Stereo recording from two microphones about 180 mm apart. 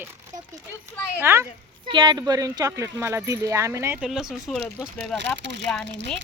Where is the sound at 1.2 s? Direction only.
15° right (ahead or behind).